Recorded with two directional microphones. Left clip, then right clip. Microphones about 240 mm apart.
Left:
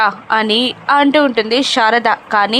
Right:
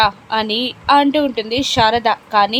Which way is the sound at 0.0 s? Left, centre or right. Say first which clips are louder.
Left 2 dB; centre.